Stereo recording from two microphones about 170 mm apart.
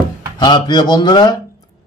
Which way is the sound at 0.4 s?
25° left (ahead or behind).